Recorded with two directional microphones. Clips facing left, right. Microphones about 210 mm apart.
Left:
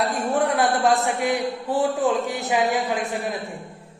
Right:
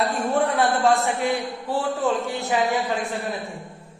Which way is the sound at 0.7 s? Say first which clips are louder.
Even; 15° left (ahead or behind).